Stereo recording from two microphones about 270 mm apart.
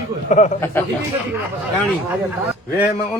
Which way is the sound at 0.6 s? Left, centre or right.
Centre.